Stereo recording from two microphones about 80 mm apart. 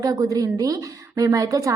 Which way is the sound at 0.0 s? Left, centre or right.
Right.